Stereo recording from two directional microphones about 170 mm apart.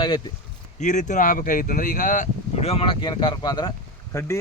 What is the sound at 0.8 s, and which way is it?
Speech, 45° left (ahead or behind).